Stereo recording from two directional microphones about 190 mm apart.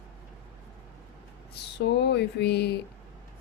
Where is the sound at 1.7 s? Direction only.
60° left (ahead or behind).